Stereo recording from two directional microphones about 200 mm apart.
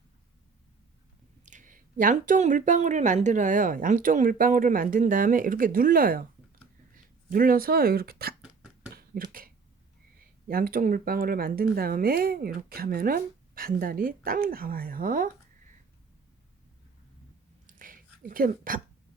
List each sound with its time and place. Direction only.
1.5 s speech: 40° right (ahead or behind)
7.3 s speech: 45° right (ahead or behind)
10.5 s speech: 45° right (ahead or behind)
17.7 s whispering: 45° right (ahead or behind)